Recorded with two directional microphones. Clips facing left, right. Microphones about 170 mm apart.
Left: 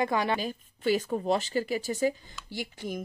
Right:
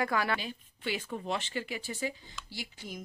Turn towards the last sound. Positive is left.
turn(degrees=50)  # may be behind; listen again after turning